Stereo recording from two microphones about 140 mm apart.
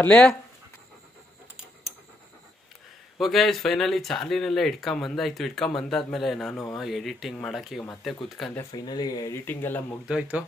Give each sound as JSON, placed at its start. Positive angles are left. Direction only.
{"t": 0.0, "sound": "speech", "side_deg": 10}
{"t": 3.2, "sound": "speech", "side_deg": 0}
{"t": 8.7, "sound": "speech", "side_deg": 30}
{"t": 10.0, "sound": "speech", "side_deg": -10}